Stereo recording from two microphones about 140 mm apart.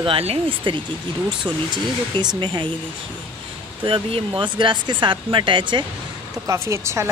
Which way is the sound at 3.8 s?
35° right (ahead or behind).